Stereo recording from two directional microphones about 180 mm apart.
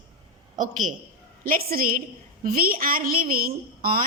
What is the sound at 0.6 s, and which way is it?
A woman's voice, 45° right (ahead or behind).